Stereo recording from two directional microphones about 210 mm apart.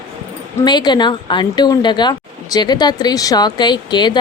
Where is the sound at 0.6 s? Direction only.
20° left (ahead or behind).